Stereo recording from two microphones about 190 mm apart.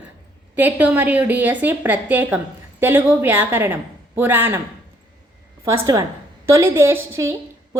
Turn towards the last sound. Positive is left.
turn(degrees=-15)  # may be behind; listen again after turning